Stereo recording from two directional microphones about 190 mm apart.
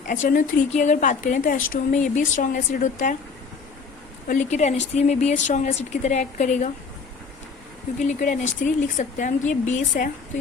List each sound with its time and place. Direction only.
0.1 s a woman's voice: 45° left (ahead or behind)
4.3 s a woman's voice: 40° left (ahead or behind)
7.9 s a woman's voice: 40° left (ahead or behind)